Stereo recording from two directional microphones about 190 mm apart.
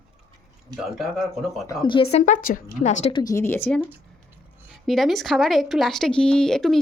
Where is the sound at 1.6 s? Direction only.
20° left (ahead or behind).